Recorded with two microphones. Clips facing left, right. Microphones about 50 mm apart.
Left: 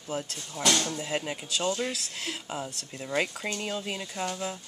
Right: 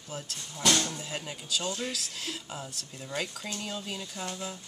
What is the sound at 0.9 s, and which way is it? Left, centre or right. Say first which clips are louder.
Speech: left 6 dB; left.